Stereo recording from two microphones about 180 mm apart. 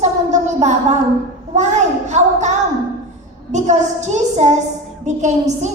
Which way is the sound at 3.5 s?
40° right (ahead or behind).